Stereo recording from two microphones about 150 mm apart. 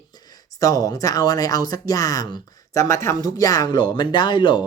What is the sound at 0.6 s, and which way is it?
Speech, 25° left (ahead or behind).